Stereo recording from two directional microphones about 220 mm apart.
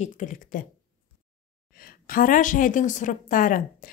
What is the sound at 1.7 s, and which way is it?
Speech, 40° left (ahead or behind).